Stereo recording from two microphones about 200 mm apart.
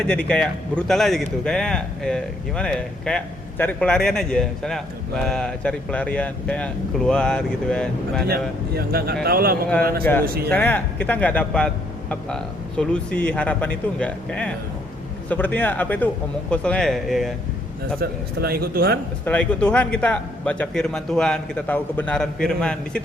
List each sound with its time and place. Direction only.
0.0 s speech: 5° left (ahead or behind)
8.3 s speech: 50° right (ahead or behind)
10.5 s speech: 10° left (ahead or behind)
18.0 s speech: 50° right (ahead or behind)
19.2 s speech: 5° left (ahead or behind)